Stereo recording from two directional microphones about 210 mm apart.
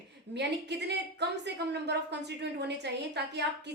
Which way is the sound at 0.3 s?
55° right (ahead or behind).